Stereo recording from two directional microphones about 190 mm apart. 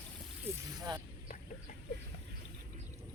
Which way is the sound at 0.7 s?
20° right (ahead or behind).